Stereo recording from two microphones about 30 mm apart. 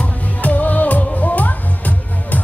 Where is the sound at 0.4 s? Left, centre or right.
Left.